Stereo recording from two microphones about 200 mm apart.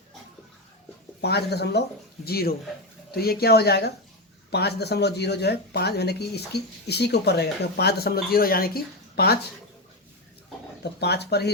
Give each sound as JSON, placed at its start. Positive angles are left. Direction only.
{"t": 1.2, "sound": "speech", "side_deg": 55}
{"t": 10.8, "sound": "speech", "side_deg": 55}